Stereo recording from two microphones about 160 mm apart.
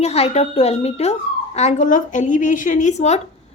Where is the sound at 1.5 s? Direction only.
50° left (ahead or behind).